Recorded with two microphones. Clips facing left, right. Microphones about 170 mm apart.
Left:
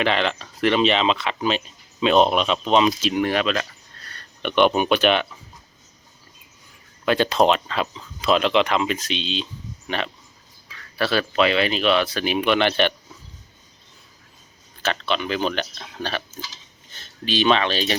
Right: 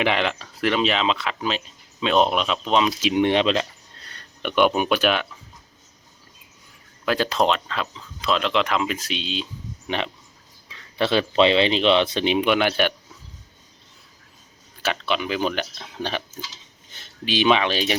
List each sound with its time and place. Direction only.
0.0 s speech: 10° right (ahead or behind)
3.0 s speech: 20° right (ahead or behind)
4.4 s speech: 5° right (ahead or behind)
7.0 s speech: centre (ahead or behind); by 12.5 s 20° right (ahead or behind)
12.5 s speech: 10° right (ahead or behind)
14.8 s speech: 10° right (ahead or behind)